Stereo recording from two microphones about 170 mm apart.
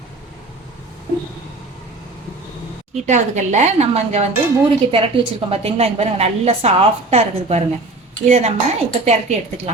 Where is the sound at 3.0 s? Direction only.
45° right (ahead or behind).